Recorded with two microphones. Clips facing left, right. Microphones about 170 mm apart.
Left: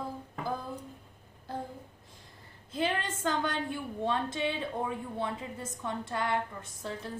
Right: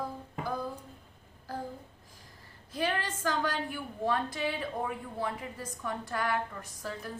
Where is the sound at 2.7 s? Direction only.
25° left (ahead or behind).